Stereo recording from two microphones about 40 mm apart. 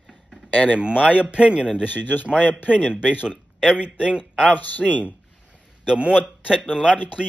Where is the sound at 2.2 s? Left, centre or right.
Right.